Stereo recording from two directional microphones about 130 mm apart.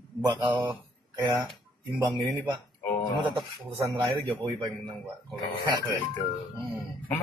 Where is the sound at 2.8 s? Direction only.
20° left (ahead or behind).